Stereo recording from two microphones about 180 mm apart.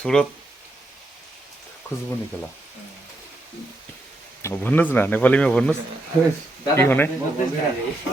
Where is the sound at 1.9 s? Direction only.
15° left (ahead or behind).